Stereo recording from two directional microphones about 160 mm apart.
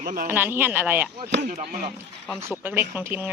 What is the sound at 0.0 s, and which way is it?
Speech, 60° right (ahead or behind).